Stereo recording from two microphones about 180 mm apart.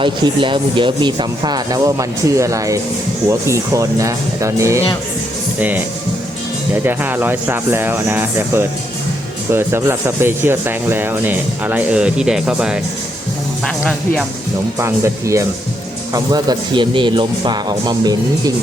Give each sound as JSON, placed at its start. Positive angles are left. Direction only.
{"t": 0.0, "sound": "speech", "side_deg": -30}
{"t": 6.8, "sound": "speech", "side_deg": -10}
{"t": 14.8, "sound": "speech", "side_deg": -15}